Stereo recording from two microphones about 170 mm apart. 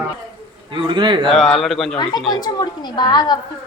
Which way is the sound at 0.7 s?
30° right (ahead or behind).